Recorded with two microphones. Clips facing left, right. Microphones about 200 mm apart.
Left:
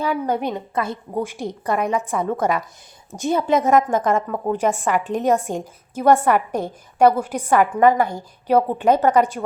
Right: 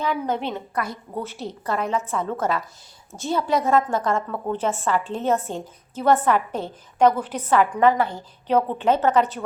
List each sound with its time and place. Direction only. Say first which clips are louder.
0.0 s a woman's voice: left 3 dB; 10° left (ahead or behind)
0.7 s a woman's voice: left 4 dB; 25° left (ahead or behind)
1.1 s a woman's voice: left 6 dB; 15° left (ahead or behind)